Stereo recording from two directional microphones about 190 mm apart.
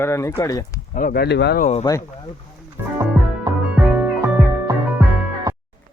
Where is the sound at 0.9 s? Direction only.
50° left (ahead or behind).